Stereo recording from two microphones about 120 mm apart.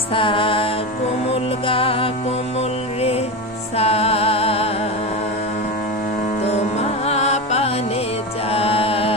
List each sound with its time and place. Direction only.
0.1 s music: 45° left (ahead or behind)
3.7 s music: 55° left (ahead or behind)
6.4 s music: 60° left (ahead or behind)
8.5 s music: 55° left (ahead or behind)